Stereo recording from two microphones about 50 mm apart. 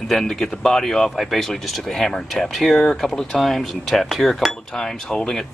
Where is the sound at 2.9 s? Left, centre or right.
Centre.